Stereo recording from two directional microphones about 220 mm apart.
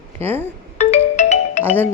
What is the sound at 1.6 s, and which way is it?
Music, 10° left (ahead or behind).